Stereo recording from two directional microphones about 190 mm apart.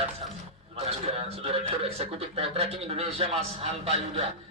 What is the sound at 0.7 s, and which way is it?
A man's voice, 30° right (ahead or behind).